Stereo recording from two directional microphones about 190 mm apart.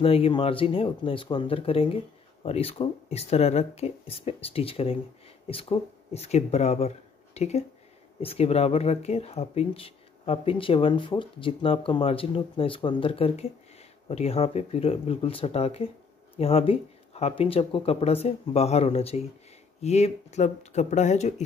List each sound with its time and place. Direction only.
0.0 s speech: 30° left (ahead or behind)